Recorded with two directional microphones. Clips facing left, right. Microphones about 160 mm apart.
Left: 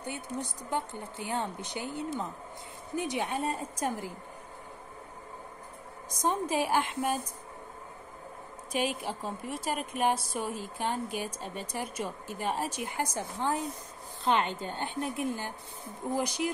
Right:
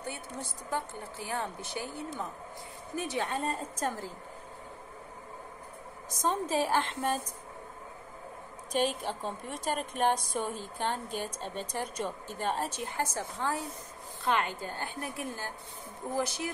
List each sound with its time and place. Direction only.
0.0 s a woman's voice: 15° left (ahead or behind)
6.2 s a woman's voice: 15° left (ahead or behind)
8.7 s a woman's voice: 10° left (ahead or behind)